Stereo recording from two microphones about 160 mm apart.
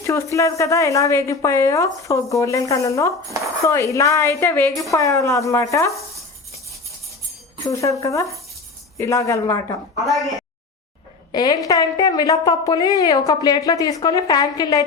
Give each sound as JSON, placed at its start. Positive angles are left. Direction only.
{"t": 0.0, "sound": "a woman's voice", "side_deg": 20}
{"t": 7.7, "sound": "a woman's voice", "side_deg": 20}
{"t": 10.0, "sound": "a woman's voice", "side_deg": 0}
{"t": 11.3, "sound": "a woman's voice", "side_deg": 25}